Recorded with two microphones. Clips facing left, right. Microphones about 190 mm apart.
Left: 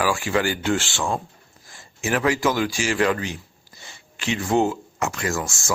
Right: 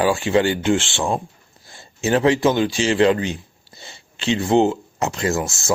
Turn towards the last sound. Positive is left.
turn(degrees=-20)  # may be behind; listen again after turning